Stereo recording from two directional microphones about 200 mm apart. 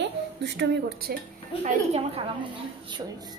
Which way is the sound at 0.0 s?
60° right (ahead or behind).